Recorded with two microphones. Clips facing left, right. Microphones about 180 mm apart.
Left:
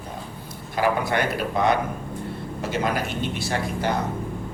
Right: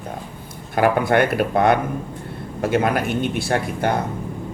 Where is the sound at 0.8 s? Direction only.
55° right (ahead or behind).